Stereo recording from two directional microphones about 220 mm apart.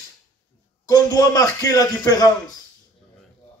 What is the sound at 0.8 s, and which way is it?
A man's voice, 15° left (ahead or behind).